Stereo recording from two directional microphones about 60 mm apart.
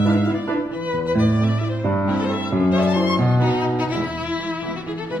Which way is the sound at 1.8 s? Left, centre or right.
Left.